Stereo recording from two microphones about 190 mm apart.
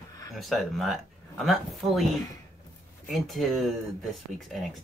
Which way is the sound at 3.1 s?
Centre (ahead or behind).